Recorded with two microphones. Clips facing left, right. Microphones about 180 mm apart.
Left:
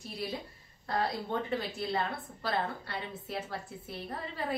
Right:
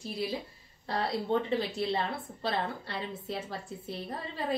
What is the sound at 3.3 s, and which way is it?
Speech, 25° right (ahead or behind).